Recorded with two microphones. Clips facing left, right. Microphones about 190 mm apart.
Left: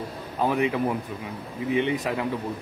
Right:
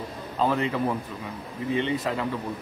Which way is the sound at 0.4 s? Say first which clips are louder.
Left 1 dB; 15° left (ahead or behind).